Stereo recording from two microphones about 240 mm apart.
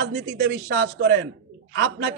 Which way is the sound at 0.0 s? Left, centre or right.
Right.